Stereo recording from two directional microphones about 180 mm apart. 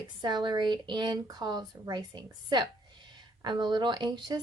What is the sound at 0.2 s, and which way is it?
Speech, 25° right (ahead or behind).